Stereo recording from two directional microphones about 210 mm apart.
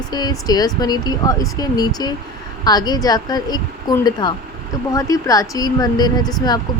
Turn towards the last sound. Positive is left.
turn(degrees=20)  # may be behind; listen again after turning